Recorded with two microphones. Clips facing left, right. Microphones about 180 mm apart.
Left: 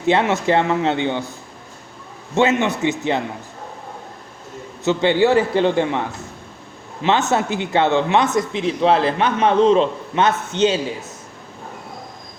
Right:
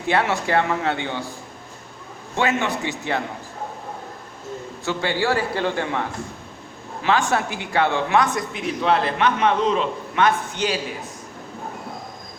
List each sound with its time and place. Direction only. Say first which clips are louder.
0.0 s speech: left 4 dB; 20° left (ahead or behind)
2.3 s speech: left 5 dB; 20° left (ahead or behind)
4.9 s speech: left 7 dB; 20° left (ahead or behind)
7.0 s speech: left 3 dB; 25° left (ahead or behind)